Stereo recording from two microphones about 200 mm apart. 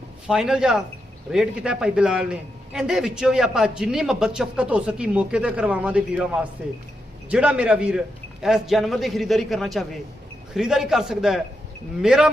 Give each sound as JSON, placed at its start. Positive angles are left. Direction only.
{"t": 0.3, "sound": "a man's voice", "side_deg": -5}